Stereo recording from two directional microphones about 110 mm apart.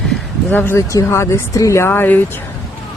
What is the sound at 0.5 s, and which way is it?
Speech, 20° left (ahead or behind).